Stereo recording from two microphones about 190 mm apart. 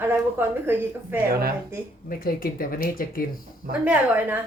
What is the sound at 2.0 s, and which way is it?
Speech, 50° left (ahead or behind).